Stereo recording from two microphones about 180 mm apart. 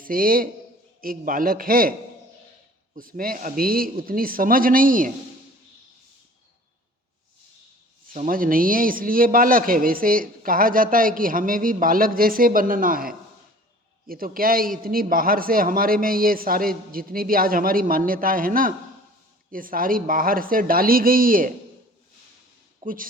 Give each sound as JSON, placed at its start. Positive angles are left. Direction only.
{"t": 0.0, "sound": "a man's voice", "side_deg": -50}
{"t": 2.9, "sound": "a man's voice", "side_deg": -50}
{"t": 8.1, "sound": "a man's voice", "side_deg": -45}
{"t": 22.8, "sound": "speech", "side_deg": -50}